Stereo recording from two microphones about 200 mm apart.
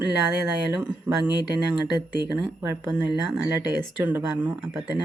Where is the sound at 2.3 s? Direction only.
15° right (ahead or behind).